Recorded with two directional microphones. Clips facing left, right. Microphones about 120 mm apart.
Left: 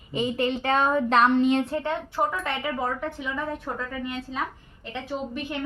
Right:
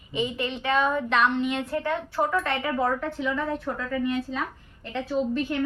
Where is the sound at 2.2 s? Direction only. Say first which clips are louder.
Right 2 dB; 10° left (ahead or behind).